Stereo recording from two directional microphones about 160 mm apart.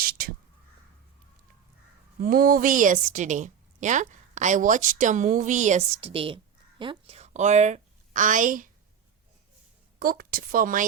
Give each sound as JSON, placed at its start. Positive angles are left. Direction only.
{"t": 0.0, "sound": "whispering", "side_deg": -65}
{"t": 2.2, "sound": "a woman's voice", "side_deg": -65}
{"t": 6.0, "sound": "a woman's voice", "side_deg": -35}
{"t": 7.2, "sound": "a woman's voice", "side_deg": -45}
{"t": 10.0, "sound": "a woman's voice", "side_deg": -65}